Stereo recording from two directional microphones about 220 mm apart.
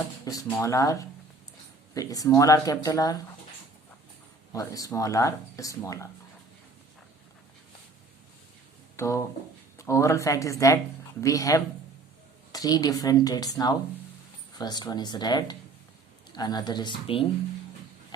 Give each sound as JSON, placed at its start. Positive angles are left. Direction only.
{"t": 0.3, "sound": "speech", "side_deg": 15}
{"t": 4.5, "sound": "speech", "side_deg": 15}
{"t": 9.0, "sound": "speech", "side_deg": 15}